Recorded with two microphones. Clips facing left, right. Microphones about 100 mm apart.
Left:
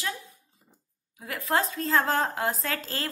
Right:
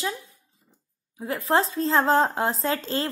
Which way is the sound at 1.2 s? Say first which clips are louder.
Right 4 dB; 30° right (ahead or behind).